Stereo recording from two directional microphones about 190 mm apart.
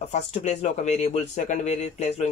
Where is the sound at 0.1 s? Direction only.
35° left (ahead or behind).